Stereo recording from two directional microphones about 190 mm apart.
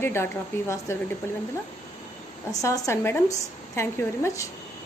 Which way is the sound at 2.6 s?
15° left (ahead or behind).